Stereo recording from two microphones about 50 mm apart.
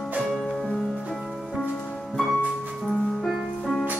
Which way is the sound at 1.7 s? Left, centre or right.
Left.